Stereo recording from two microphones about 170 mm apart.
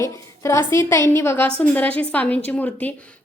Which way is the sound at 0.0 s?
15° left (ahead or behind).